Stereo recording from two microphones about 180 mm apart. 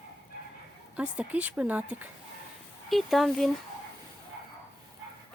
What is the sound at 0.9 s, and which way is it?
Speech, 10° right (ahead or behind).